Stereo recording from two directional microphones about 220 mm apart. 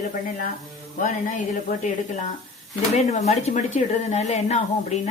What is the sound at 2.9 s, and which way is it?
Speech, 30° left (ahead or behind).